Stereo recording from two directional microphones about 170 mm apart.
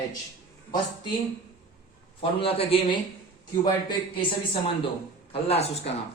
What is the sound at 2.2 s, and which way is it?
Speech, 35° left (ahead or behind).